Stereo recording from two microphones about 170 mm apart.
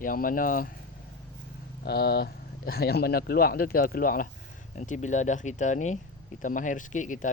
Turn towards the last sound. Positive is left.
turn(degrees=50)  # may be behind; listen again after turning